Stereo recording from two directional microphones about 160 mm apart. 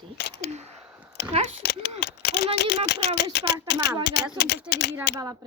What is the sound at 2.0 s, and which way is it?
Speech, 85° left.